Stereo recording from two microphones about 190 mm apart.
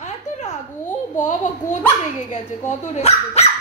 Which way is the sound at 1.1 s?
40° left (ahead or behind).